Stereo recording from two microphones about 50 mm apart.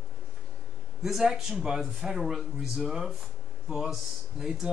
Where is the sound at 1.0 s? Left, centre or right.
Centre.